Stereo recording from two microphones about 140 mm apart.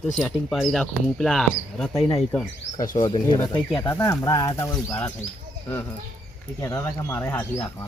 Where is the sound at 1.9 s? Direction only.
25° left (ahead or behind).